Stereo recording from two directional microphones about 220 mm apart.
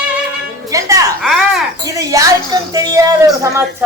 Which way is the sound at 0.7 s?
15° right (ahead or behind).